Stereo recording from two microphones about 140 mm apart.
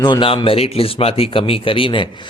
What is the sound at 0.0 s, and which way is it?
A man's voice, 35° left (ahead or behind).